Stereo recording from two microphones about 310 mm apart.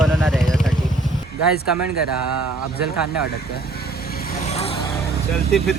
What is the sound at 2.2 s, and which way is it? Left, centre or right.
Speech, right.